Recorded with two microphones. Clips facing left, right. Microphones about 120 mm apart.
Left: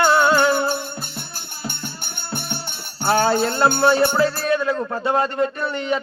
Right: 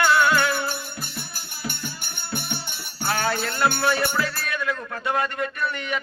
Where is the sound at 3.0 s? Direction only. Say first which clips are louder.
Left 7 dB; 30° left (ahead or behind).